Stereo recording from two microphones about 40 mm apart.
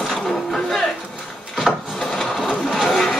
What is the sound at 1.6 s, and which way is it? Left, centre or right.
Wood, centre.